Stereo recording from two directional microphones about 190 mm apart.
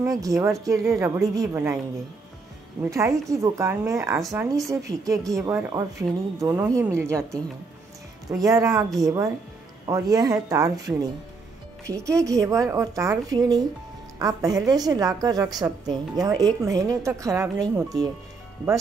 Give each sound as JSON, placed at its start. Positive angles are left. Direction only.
{"t": 0.0, "sound": "speech", "side_deg": -15}
{"t": 2.8, "sound": "speech", "side_deg": -15}
{"t": 4.2, "sound": "speech", "side_deg": 0}
{"t": 4.8, "sound": "a woman's voice", "side_deg": -20}